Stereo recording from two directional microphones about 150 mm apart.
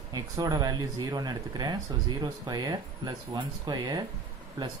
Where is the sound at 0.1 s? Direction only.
25° right (ahead or behind).